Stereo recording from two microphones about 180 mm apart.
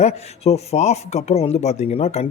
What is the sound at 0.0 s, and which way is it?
Speech, 35° left (ahead or behind).